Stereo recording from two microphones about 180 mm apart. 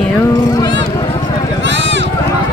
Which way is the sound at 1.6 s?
90° right.